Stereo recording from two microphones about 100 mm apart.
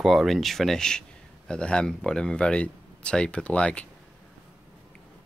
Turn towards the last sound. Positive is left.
turn(degrees=10)  # may be behind; listen again after turning